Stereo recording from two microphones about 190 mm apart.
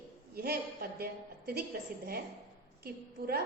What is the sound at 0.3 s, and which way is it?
A man's voice, 55° right (ahead or behind).